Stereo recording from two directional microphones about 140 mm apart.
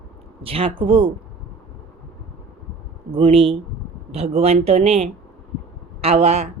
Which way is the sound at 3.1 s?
40° right (ahead or behind).